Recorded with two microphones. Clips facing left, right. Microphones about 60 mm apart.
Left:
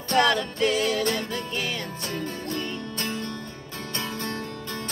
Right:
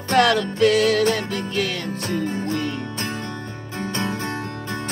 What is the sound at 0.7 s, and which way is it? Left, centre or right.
Music, right.